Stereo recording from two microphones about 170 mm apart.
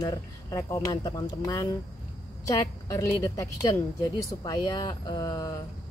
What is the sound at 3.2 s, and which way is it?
Speech, 20° left (ahead or behind).